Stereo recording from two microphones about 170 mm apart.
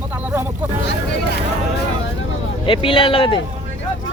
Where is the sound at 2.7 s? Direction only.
30° left (ahead or behind).